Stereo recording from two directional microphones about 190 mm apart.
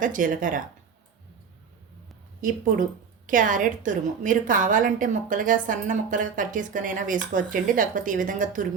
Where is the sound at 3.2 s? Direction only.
45° right (ahead or behind).